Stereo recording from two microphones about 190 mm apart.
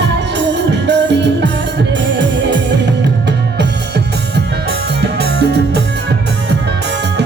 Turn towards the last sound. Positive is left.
turn(degrees=-60)  # may be behind; listen again after turning